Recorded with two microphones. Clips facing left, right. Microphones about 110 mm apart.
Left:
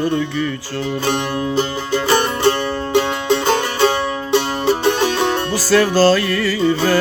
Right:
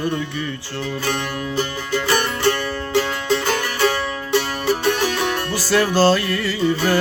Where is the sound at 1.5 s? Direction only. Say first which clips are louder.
Left 2 dB; 20° left (ahead or behind).